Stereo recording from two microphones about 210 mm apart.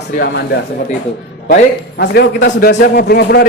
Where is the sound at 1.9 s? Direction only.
50° left (ahead or behind).